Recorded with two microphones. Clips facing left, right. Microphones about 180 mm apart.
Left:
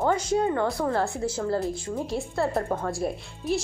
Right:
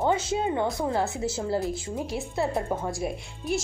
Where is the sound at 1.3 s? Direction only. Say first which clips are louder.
Left 1 dB; 25° right (ahead or behind).